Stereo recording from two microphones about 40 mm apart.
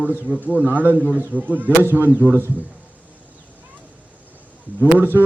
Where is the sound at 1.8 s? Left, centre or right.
Right.